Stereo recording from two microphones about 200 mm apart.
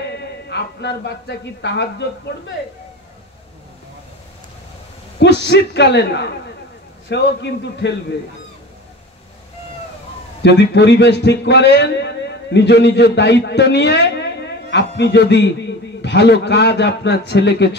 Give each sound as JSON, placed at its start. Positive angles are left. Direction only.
{"t": 0.2, "sound": "a man's voice", "side_deg": 60}
{"t": 5.2, "sound": "a man's voice", "side_deg": 60}
{"t": 10.4, "sound": "a man's voice", "side_deg": 60}